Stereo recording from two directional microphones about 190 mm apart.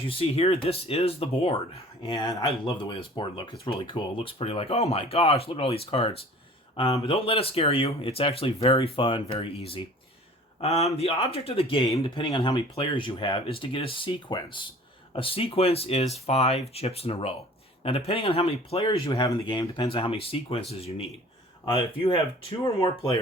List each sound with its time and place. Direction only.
0.1 s speech: 30° left (ahead or behind)